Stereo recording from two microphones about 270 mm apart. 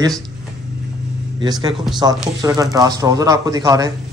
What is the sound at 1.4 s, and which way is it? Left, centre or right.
Speech, centre.